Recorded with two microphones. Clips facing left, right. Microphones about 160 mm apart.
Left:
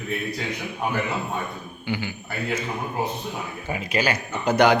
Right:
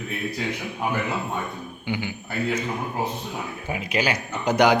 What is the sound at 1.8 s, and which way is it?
Speech, 15° right (ahead or behind).